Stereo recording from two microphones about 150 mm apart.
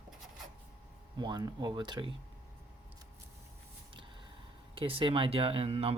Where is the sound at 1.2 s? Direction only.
25° right (ahead or behind).